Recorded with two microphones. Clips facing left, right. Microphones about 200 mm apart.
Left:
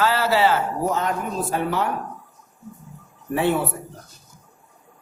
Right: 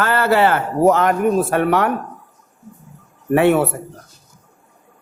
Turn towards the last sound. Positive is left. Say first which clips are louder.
# right 7 dB
turn(degrees=-65)  # may be behind; listen again after turning